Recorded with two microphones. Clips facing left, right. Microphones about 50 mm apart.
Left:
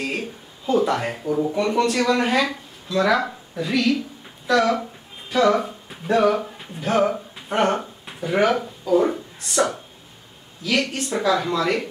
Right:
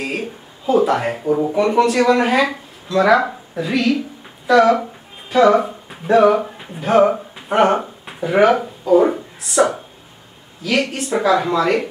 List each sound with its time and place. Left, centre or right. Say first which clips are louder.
0.0 s a sound: right 3 dB; centre
1.2 s speech: right 3 dB; right
1.5 s a woman's voice: right 6 dB; centre